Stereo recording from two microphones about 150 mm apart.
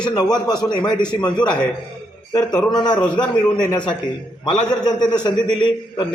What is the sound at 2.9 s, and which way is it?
Speech, 5° left (ahead or behind).